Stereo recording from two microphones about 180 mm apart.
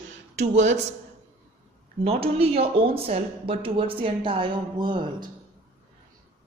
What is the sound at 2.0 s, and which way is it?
A woman's voice, 35° right (ahead or behind).